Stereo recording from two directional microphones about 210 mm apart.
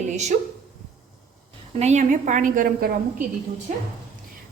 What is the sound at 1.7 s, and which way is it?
A woman's voice, 30° right (ahead or behind).